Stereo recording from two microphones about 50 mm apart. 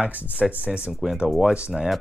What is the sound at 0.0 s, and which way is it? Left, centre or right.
Speech, right.